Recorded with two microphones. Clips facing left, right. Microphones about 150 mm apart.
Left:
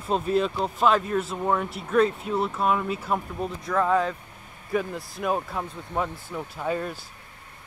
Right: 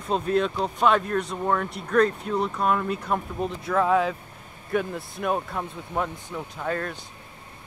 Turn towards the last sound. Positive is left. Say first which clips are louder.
# left 1 dB
turn(degrees=10)  # may be behind; listen again after turning